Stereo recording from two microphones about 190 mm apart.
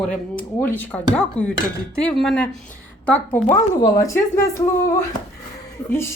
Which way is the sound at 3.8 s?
20° left (ahead or behind).